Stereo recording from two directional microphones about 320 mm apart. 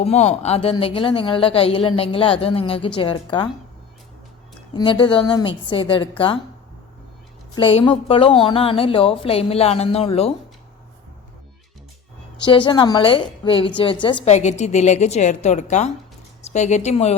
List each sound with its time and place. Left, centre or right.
0.0 s speech: centre
4.7 s speech: centre
7.5 s speech: centre
12.5 s a woman's voice: centre